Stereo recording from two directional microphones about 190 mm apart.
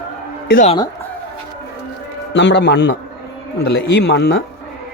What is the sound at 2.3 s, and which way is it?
A man's voice, 70° left (ahead or behind).